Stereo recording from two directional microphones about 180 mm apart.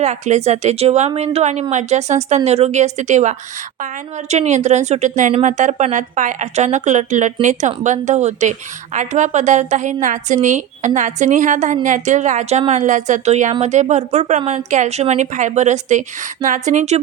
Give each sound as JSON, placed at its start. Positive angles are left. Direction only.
{"t": 0.0, "sound": "a woman's voice", "side_deg": -40}